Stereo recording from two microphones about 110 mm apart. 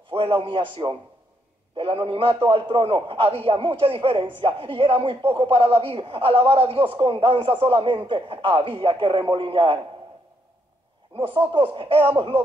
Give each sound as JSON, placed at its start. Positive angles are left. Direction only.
{"t": 0.1, "sound": "a man's voice", "side_deg": -60}
{"t": 11.5, "sound": "a man's voice", "side_deg": -55}